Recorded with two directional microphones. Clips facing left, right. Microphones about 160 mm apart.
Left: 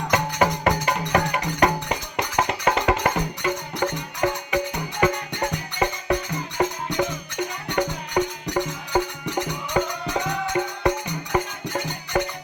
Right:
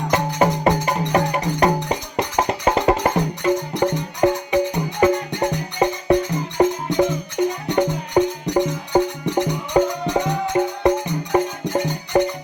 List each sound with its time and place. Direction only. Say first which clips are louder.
0.1 s music: right 3 dB; 30° right (ahead or behind)
7.8 s music: right 5 dB; 25° right (ahead or behind)